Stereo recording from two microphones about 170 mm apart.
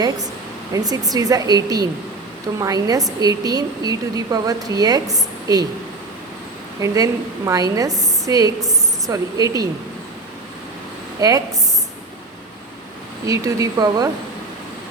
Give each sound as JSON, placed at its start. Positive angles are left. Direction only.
{"t": 0.9, "sound": "a woman's voice", "side_deg": -20}
{"t": 6.7, "sound": "a woman's voice", "side_deg": -20}
{"t": 11.2, "sound": "a woman's voice", "side_deg": -20}
{"t": 13.2, "sound": "a woman's voice", "side_deg": -20}